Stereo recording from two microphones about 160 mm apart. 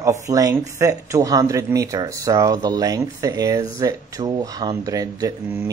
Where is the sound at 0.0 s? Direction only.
20° right (ahead or behind).